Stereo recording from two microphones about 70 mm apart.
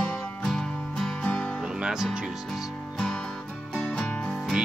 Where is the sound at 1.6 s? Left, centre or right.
Centre.